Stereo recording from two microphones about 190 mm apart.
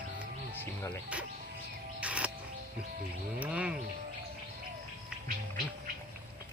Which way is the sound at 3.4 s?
5° right (ahead or behind).